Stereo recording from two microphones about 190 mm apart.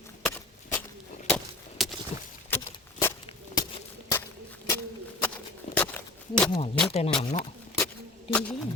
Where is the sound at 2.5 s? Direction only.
10° left (ahead or behind).